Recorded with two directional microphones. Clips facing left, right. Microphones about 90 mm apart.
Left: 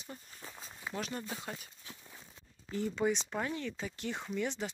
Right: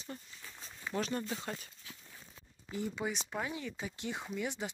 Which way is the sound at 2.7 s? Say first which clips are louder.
Left 5 dB; 15° right (ahead or behind).